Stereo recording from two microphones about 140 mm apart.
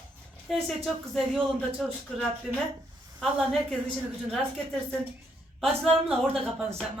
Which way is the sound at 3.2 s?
5° left (ahead or behind).